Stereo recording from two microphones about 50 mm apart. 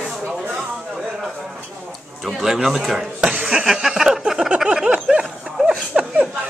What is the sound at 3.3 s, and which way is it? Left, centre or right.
Speech, right.